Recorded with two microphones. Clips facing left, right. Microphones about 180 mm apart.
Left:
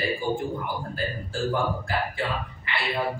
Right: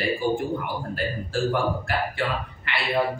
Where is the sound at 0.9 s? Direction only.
70° right (ahead or behind).